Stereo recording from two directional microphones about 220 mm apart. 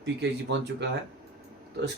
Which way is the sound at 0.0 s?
50° right (ahead or behind).